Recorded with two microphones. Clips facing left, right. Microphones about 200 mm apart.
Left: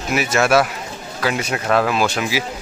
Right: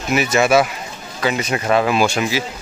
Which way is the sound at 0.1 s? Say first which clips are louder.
Right 1 dB; 5° left (ahead or behind).